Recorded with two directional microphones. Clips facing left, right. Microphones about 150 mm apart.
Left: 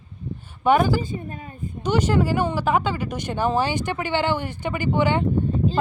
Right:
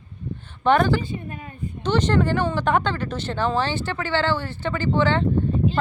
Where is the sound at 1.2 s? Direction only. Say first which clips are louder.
Even; 35° left (ahead or behind).